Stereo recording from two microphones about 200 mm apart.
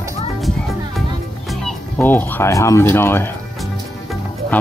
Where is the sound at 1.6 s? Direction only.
10° left (ahead or behind).